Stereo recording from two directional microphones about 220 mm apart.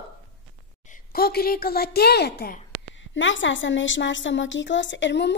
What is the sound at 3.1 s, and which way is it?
A child's voice, 60° left (ahead or behind).